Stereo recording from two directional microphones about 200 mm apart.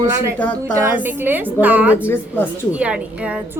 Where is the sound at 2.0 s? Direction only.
10° left (ahead or behind).